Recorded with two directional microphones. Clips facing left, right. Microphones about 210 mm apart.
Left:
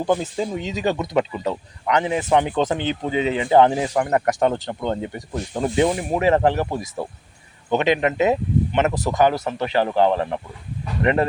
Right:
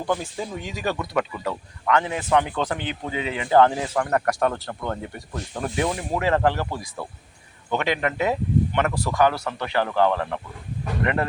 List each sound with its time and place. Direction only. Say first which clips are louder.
0.0 s speech: left 5 dB; 20° left (ahead or behind)